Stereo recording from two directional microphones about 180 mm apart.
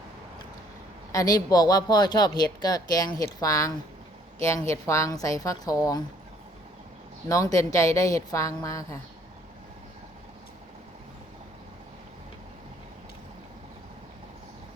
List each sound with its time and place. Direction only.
1.1 s a woman's voice: 20° left (ahead or behind)
7.3 s a woman's voice: 20° left (ahead or behind)